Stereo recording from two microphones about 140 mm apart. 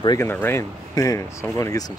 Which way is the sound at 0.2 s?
15° left (ahead or behind).